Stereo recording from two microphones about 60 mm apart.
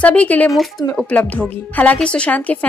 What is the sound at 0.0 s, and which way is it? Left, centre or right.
A woman's voice, left.